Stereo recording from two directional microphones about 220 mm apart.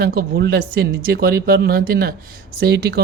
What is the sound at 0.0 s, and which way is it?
Speech, 45° right (ahead or behind).